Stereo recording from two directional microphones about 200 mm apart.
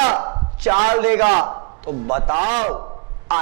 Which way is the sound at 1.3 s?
25° right (ahead or behind).